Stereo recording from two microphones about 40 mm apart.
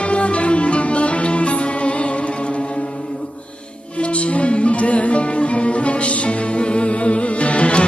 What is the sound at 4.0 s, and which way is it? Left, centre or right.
Music, left.